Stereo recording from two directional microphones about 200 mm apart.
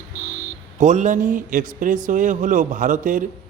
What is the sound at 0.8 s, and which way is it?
A man's voice, 40° right (ahead or behind).